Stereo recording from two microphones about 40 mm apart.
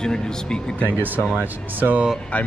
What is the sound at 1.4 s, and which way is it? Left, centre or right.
Speech, right.